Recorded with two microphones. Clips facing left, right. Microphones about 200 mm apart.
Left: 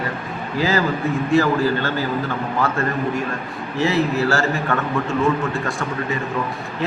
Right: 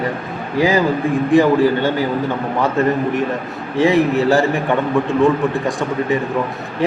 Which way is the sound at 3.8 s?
15° right (ahead or behind).